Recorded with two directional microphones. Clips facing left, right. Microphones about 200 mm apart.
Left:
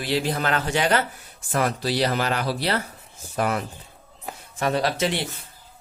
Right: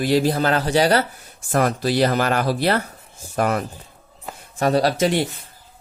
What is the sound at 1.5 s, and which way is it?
Speech, 45° right (ahead or behind).